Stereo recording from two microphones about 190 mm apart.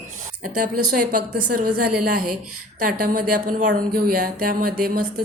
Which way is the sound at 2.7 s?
45° right (ahead or behind).